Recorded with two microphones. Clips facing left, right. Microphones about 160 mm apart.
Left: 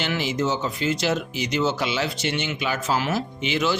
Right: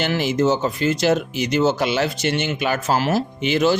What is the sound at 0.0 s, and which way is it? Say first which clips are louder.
Speech: right 5 dB; 50° right (ahead or behind).